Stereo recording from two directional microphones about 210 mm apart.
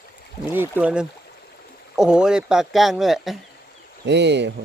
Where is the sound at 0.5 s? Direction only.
10° right (ahead or behind).